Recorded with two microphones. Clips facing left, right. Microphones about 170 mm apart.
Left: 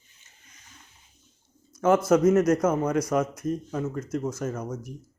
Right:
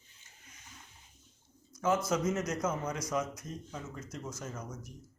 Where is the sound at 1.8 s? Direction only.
55° left (ahead or behind).